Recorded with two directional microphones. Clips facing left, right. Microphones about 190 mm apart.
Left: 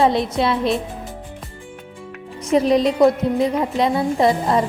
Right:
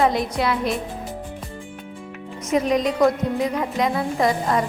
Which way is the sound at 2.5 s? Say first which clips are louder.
Left 4 dB; 30° left (ahead or behind).